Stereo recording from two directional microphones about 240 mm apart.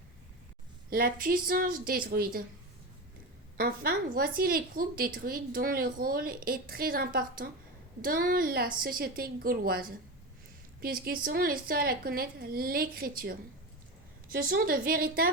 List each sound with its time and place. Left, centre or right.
0.9 s a woman's voice: right
3.6 s a woman's voice: right
14.3 s a woman's voice: right